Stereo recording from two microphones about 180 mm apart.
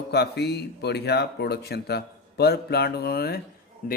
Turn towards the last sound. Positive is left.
turn(degrees=50)  # may be behind; listen again after turning